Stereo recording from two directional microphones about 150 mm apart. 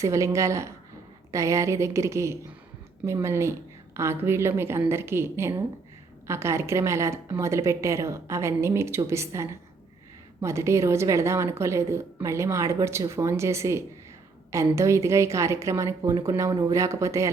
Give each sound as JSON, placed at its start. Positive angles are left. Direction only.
{"t": 0.0, "sound": "a woman's voice", "side_deg": -20}